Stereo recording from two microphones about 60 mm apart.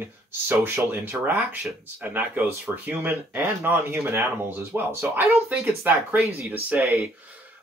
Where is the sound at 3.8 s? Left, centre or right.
Right.